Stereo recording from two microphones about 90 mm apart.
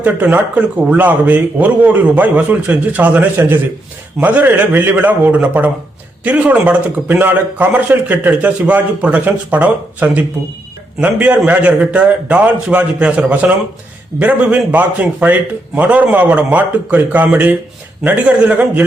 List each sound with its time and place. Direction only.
0.0 s a man's voice: 20° right (ahead or behind)